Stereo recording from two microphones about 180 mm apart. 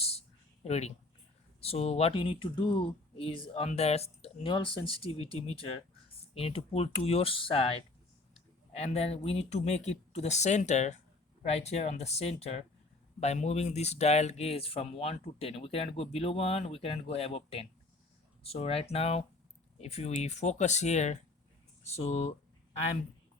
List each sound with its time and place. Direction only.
0.0 s a sound: 35° left (ahead or behind)
1.6 s speech: 35° left (ahead or behind)
8.7 s speech: 35° left (ahead or behind)